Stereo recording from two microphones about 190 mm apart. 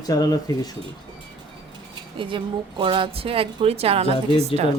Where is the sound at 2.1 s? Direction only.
25° right (ahead or behind).